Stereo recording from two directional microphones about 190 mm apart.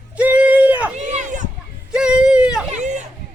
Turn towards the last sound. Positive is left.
turn(degrees=-40)  # may be behind; listen again after turning